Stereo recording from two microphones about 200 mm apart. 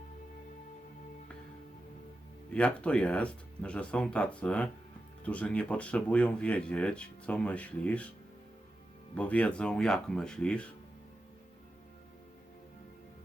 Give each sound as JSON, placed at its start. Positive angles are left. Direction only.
{"t": 2.5, "sound": "speech", "side_deg": 5}
{"t": 9.1, "sound": "speech", "side_deg": 5}